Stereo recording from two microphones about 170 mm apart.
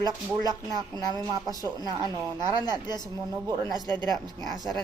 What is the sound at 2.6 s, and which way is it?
Speech, 25° left (ahead or behind).